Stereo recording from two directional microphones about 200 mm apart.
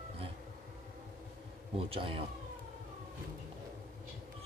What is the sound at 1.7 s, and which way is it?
Speech, 25° right (ahead or behind).